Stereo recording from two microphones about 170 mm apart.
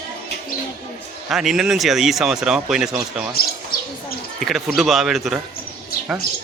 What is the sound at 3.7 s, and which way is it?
Bird, 60° left (ahead or behind).